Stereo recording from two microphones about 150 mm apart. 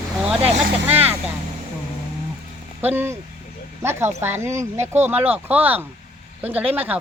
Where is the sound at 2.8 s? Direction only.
15° right (ahead or behind).